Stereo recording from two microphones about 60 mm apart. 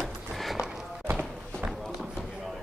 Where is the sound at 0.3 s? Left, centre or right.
Centre.